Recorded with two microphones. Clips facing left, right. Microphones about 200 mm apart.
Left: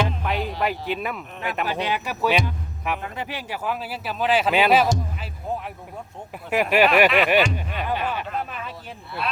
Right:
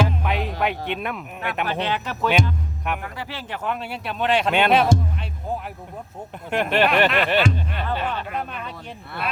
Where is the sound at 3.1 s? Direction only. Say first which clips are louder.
Left 1 dB; 15° left (ahead or behind).